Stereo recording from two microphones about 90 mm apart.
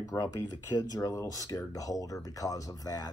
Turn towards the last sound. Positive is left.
turn(degrees=45)  # may be behind; listen again after turning